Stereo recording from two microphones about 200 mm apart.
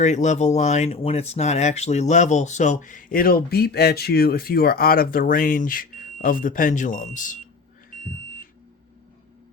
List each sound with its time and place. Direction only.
0.0 s speech: 35° left (ahead or behind)